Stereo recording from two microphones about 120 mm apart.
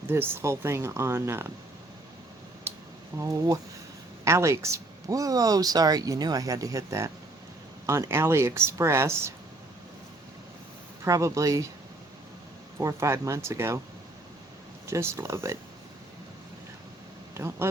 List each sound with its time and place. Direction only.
0.1 s speech: 20° right (ahead or behind)
2.7 s a sound: 20° right (ahead or behind)
3.2 s speech: 25° right (ahead or behind)
11.0 s speech: 25° right (ahead or behind)
12.8 s speech: 25° right (ahead or behind)
14.8 s speech: 25° right (ahead or behind)
17.3 s speech: 20° right (ahead or behind)